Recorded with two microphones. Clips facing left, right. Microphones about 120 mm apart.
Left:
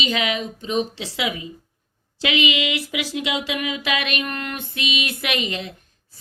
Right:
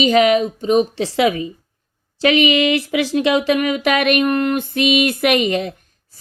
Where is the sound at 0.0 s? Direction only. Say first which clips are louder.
Right 11 dB; 45° right (ahead or behind).